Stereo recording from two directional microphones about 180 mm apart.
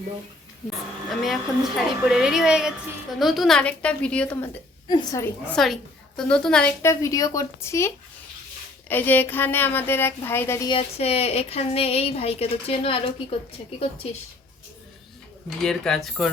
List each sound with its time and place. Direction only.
1.2 s a woman's voice: centre (ahead or behind)
4.9 s a woman's voice: 20° left (ahead or behind)
5.5 s a woman's voice: centre (ahead or behind)
10.7 s speech: 35° left (ahead or behind)
15.4 s a woman's voice: 5° left (ahead or behind)